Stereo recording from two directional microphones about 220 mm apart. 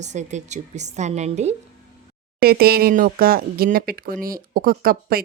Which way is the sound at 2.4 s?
45° right (ahead or behind).